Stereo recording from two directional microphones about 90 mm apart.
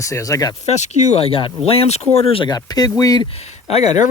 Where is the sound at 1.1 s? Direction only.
90° left.